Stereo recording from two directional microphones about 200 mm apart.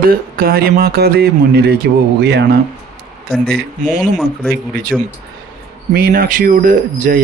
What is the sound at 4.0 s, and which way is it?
Speech, centre (ahead or behind).